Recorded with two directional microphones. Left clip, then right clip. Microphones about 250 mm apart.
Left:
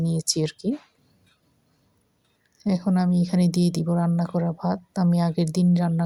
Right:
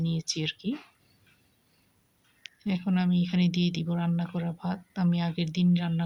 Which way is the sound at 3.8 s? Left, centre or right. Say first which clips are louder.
Left 7 dB; centre.